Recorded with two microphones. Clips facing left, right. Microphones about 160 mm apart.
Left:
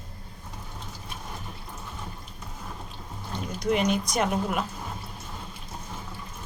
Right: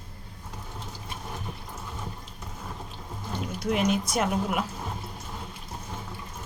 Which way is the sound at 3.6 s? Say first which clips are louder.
Left 1 dB; centre (ahead or behind).